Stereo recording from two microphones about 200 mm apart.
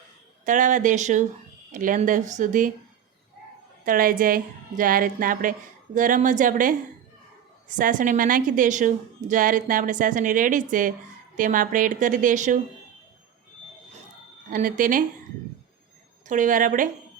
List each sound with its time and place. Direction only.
0.4 s a woman's voice: 40° right (ahead or behind)
3.8 s a woman's voice: 45° right (ahead or behind)
14.5 s a woman's voice: 40° right (ahead or behind)
16.2 s a woman's voice: 40° right (ahead or behind)